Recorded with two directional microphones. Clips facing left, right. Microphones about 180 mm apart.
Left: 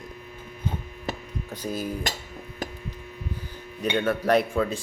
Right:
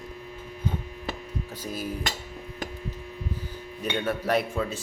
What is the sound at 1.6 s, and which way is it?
Cutlery, 10° right (ahead or behind).